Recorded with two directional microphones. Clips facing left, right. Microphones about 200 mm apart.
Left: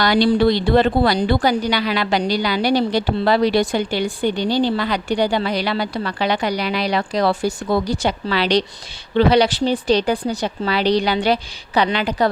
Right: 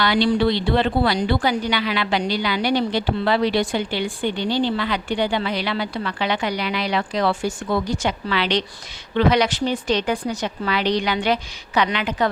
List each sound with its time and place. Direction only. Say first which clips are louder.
0.0 s a woman's voice: left 3 dB; 40° left (ahead or behind)